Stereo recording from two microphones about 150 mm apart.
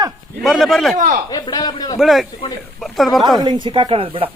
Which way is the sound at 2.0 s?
Centre (ahead or behind).